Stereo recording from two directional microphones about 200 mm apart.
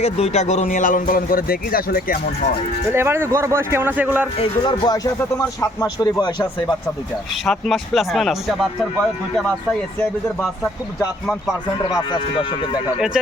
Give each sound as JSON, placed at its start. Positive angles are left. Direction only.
{"t": 0.0, "sound": "speech", "side_deg": 35}
{"t": 2.9, "sound": "a man's voice", "side_deg": -10}
{"t": 4.4, "sound": "speech", "side_deg": 25}
{"t": 7.4, "sound": "speech", "side_deg": 0}
{"t": 11.8, "sound": "speech", "side_deg": 25}